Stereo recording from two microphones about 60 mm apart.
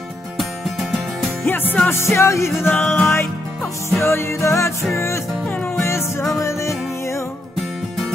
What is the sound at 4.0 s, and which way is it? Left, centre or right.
Music, left.